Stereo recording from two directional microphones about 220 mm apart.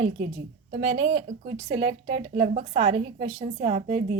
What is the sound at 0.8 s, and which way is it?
A woman's voice, 30° right (ahead or behind).